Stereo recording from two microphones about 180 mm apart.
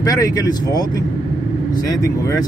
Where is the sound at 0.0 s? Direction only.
20° left (ahead or behind).